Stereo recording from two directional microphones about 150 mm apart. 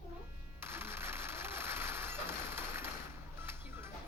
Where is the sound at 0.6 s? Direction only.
15° right (ahead or behind).